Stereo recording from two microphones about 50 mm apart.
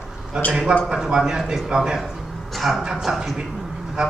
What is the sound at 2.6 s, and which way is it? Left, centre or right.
Speech, centre.